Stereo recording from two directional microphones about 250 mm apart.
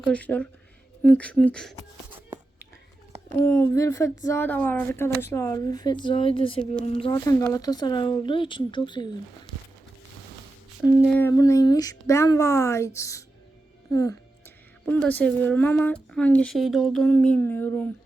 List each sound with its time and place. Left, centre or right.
0.0 s speech: centre
3.3 s speech: centre
10.8 s speech: centre
11.1 s speech: centre